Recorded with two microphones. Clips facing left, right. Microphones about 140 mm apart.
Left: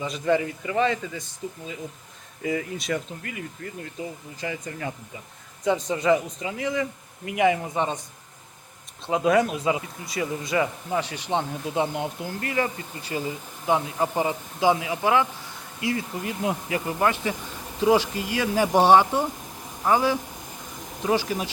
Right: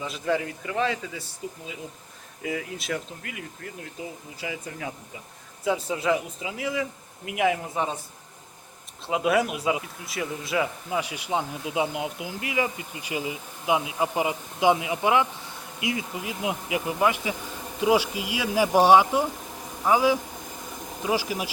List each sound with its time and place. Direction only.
0.0 s speech: centre (ahead or behind)
9.0 s speech: 5° right (ahead or behind)
16.1 s speech: 5° right (ahead or behind)